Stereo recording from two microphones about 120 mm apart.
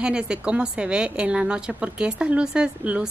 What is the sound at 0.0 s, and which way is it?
Speech, 5° right (ahead or behind).